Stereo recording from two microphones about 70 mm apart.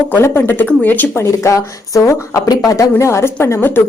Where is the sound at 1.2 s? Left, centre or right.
Left.